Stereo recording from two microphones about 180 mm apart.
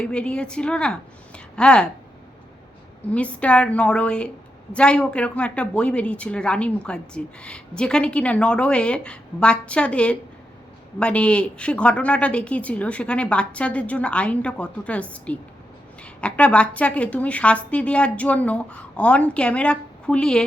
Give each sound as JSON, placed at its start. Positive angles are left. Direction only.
{"t": 0.0, "sound": "a woman's voice", "side_deg": 5}
{"t": 3.1, "sound": "a woman's voice", "side_deg": 5}